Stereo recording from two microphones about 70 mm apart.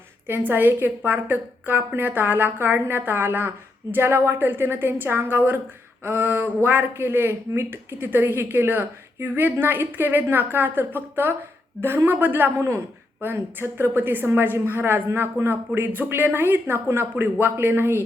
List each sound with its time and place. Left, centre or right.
0.3 s a woman's voice: right